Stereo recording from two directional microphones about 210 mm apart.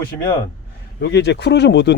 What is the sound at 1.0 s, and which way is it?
Speech, 55° left (ahead or behind).